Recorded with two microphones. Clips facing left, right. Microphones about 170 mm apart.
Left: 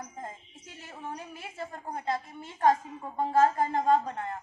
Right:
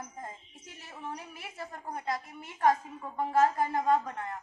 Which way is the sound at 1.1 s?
25° left (ahead or behind).